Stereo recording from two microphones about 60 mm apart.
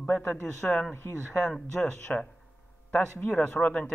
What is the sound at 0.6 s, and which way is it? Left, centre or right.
Speech, centre.